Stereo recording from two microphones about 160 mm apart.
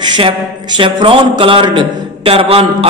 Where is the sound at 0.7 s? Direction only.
30° right (ahead or behind).